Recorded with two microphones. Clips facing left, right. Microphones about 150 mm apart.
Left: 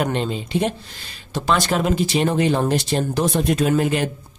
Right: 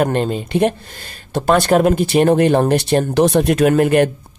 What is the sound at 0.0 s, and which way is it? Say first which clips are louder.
Speech: right 5 dB; 50° right (ahead or behind).